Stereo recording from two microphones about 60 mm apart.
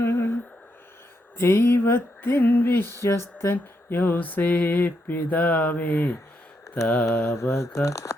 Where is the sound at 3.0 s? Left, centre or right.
Left.